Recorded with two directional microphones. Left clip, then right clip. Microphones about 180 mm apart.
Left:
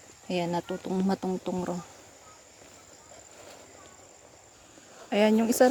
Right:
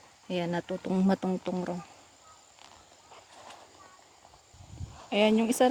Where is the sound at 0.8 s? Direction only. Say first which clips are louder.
Right 3 dB; 25° right (ahead or behind).